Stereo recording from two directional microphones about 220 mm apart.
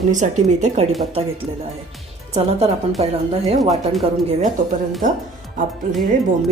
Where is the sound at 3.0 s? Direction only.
25° right (ahead or behind).